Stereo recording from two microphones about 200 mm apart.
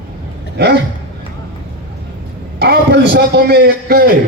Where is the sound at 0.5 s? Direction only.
55° right (ahead or behind).